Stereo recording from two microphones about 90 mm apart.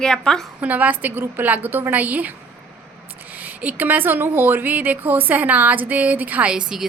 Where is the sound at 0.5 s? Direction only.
15° right (ahead or behind).